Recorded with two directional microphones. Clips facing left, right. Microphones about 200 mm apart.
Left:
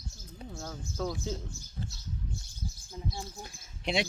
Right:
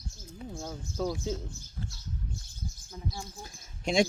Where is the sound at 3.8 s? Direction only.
45° right (ahead or behind).